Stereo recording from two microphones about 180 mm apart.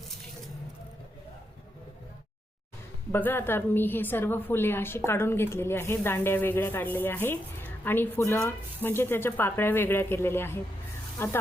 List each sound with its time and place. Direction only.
3.1 s a woman's voice: 10° left (ahead or behind)